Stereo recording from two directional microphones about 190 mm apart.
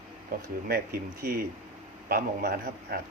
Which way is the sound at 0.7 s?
50° right (ahead or behind).